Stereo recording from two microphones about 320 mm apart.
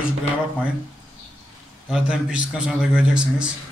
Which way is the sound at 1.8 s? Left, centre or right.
Centre.